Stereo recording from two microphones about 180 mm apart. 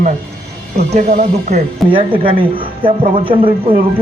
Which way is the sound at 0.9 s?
35° right (ahead or behind).